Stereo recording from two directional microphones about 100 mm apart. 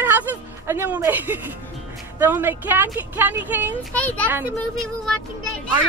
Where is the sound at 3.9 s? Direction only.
15° left (ahead or behind).